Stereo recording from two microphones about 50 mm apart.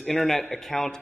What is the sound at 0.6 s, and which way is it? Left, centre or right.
Speech, centre.